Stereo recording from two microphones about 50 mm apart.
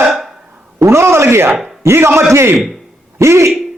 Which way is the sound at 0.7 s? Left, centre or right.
Right.